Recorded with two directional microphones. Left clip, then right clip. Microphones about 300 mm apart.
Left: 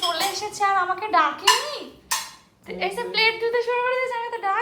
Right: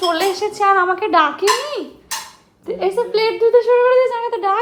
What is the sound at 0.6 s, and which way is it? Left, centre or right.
Speech, centre.